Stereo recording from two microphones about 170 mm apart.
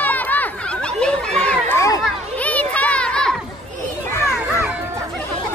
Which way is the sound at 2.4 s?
10° left (ahead or behind).